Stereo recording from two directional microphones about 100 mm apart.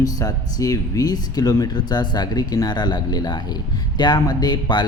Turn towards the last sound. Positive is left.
turn(degrees=45)  # may be behind; listen again after turning